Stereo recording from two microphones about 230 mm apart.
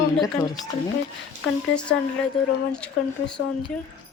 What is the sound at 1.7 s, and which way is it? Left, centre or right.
Speech, centre.